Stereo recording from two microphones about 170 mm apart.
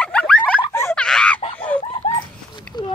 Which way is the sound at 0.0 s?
5° left (ahead or behind).